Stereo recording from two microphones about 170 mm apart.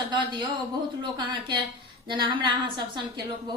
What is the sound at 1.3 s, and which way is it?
A woman's voice, 25° right (ahead or behind).